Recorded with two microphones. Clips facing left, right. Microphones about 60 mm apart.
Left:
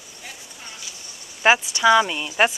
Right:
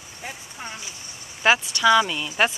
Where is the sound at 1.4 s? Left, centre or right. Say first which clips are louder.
Left 2 dB; left.